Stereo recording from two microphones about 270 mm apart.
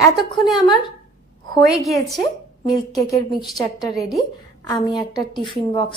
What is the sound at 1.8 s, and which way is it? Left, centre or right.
Speech, centre.